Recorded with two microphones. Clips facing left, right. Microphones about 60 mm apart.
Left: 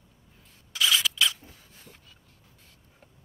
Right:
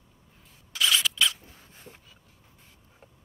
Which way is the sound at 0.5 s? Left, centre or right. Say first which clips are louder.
Even; centre.